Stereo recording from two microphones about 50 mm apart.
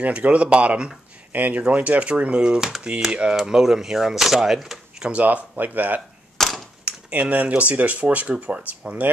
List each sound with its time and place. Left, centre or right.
0.0 s speech: right
1.3 s speech: right; by 5.1 s centre
5.1 s speech: right
6.3 s a sound: centre
6.8 s speech: right